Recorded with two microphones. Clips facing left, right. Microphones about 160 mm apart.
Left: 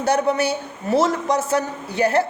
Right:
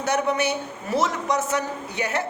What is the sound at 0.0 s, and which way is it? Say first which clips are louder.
A woman's voice: left 4 dB; 35° left (ahead or behind).